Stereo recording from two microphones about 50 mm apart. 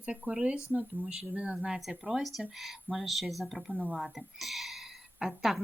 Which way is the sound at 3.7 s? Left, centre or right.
Right.